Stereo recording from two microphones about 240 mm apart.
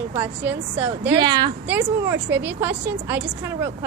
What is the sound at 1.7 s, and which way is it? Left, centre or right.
A woman's voice, centre.